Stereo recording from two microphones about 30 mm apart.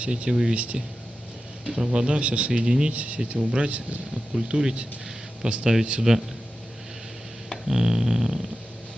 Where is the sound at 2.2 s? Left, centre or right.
Right.